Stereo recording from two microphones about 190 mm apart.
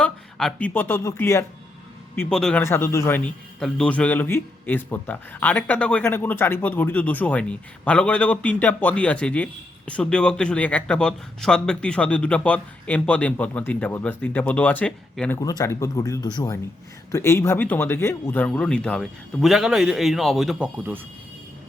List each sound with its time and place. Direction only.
0.0 s speech: 5° left (ahead or behind)
2.1 s speech: 5° left (ahead or behind)
15.4 s speech: 20° left (ahead or behind); by 21.0 s 10° right (ahead or behind)